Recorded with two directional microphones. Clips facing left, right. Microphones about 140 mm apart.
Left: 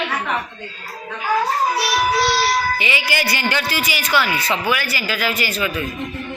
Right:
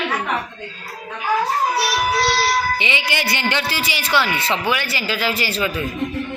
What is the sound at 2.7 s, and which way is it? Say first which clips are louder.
Speech: left 1 dB; 25° right (ahead or behind).